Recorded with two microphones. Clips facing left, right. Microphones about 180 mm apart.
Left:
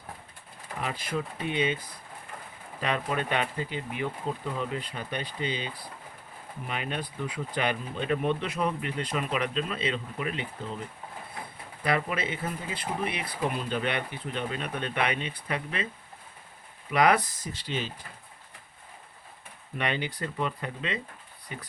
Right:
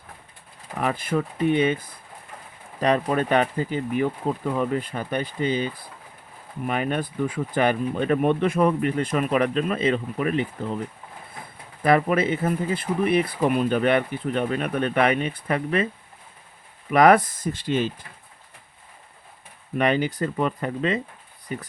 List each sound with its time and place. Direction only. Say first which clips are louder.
0.8 s speech: right 8 dB; 55° right (ahead or behind)
2.8 s speech: right 8 dB; 40° right (ahead or behind)
11.8 s speech: right 9 dB; 50° right (ahead or behind)
16.9 s speech: right 7 dB; 50° right (ahead or behind)
19.8 s speech: right 9 dB; 45° right (ahead or behind)